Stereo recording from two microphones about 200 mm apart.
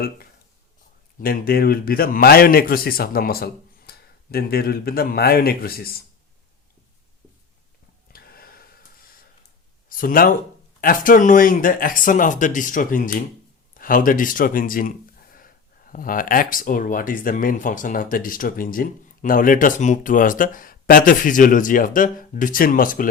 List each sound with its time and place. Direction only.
1.2 s speech: 50° left (ahead or behind)
8.1 s a sound: 50° left (ahead or behind)
9.9 s speech: 45° left (ahead or behind)